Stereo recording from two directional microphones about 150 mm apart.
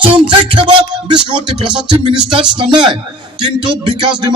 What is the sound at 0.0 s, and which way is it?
Speech, 35° right (ahead or behind).